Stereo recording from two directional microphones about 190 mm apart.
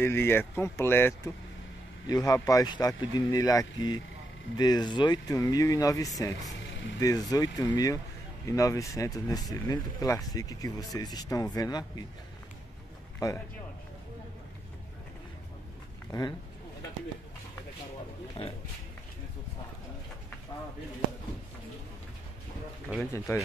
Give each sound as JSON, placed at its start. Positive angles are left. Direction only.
{"t": 0.0, "sound": "speech", "side_deg": 10}
{"t": 13.2, "sound": "speech", "side_deg": 20}
{"t": 16.1, "sound": "speech", "side_deg": 20}
{"t": 18.4, "sound": "a man's voice", "side_deg": 30}
{"t": 23.3, "sound": "speech", "side_deg": 15}